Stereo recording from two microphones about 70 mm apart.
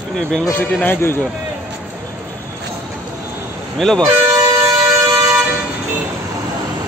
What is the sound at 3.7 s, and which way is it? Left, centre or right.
Speech, centre.